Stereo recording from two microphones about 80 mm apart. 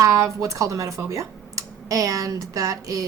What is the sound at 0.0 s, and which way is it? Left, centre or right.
Speech, right.